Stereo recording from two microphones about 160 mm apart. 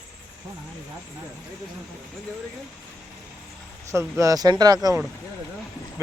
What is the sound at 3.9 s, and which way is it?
Speech, 20° right (ahead or behind).